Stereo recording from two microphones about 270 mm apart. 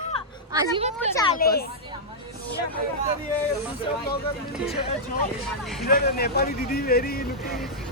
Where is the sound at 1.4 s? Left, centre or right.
Left.